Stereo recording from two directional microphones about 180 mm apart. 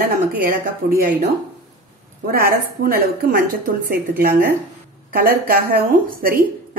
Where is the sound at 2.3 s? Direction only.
55° right (ahead or behind).